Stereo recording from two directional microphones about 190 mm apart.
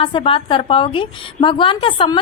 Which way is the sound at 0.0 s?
25° left (ahead or behind).